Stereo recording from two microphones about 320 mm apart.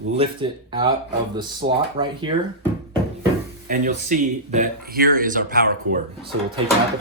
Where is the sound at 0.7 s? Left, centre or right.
Centre.